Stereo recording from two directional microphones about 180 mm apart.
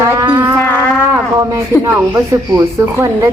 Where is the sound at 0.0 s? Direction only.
20° right (ahead or behind).